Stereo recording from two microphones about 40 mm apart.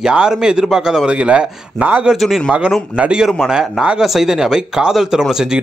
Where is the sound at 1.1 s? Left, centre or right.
Right.